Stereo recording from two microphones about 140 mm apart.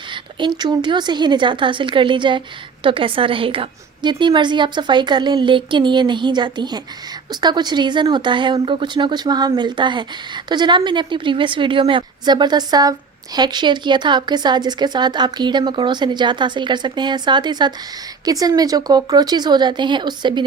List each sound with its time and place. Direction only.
0.1 s speech: 35° right (ahead or behind)